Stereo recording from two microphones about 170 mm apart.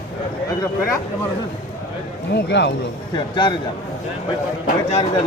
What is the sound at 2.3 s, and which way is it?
Speech, 90° left.